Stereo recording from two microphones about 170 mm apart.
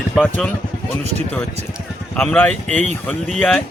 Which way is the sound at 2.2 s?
10° left (ahead or behind).